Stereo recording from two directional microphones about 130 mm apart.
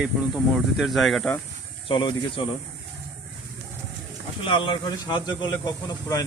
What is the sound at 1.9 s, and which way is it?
Speech, 35° left (ahead or behind).